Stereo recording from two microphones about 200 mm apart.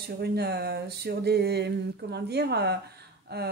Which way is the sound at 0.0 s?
55° right (ahead or behind).